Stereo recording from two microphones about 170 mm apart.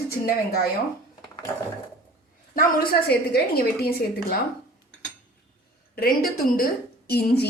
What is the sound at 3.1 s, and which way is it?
Speech, 65° left (ahead or behind).